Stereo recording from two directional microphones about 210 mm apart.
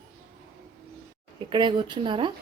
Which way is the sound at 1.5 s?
25° right (ahead or behind).